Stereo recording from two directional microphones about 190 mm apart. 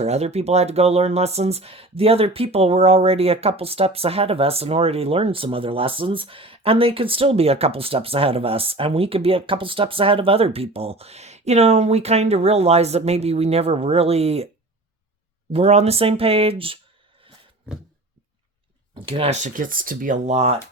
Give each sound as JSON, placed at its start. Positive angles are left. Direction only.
{"t": 0.0, "sound": "speech", "side_deg": -35}
{"t": 15.5, "sound": "speech", "side_deg": -35}
{"t": 18.9, "sound": "speech", "side_deg": -30}